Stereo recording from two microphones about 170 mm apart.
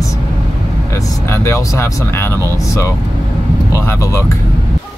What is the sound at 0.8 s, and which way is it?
Speech, 15° left (ahead or behind).